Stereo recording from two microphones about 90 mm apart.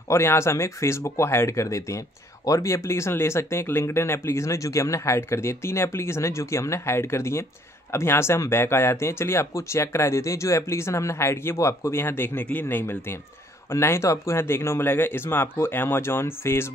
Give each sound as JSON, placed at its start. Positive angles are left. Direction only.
{"t": 0.1, "sound": "speech", "side_deg": 30}